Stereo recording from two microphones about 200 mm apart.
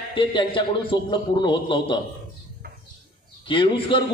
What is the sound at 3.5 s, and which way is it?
Speech, 25° left (ahead or behind).